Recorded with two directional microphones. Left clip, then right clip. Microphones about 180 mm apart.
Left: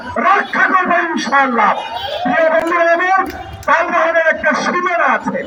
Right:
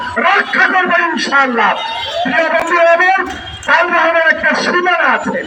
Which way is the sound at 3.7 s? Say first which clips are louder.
Right 2 dB; 25° right (ahead or behind).